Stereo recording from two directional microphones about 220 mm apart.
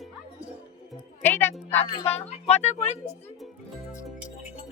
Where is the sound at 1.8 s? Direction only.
25° left (ahead or behind).